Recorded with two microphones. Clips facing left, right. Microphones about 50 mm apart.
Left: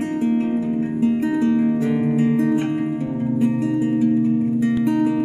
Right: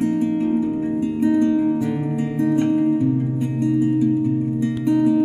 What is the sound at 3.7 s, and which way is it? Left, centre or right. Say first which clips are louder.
Music: right 1 dB; centre.